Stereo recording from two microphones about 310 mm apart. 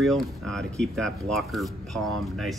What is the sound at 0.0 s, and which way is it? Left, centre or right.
Speech, centre.